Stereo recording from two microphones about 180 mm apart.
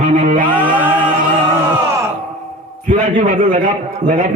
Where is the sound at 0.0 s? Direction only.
45° right (ahead or behind).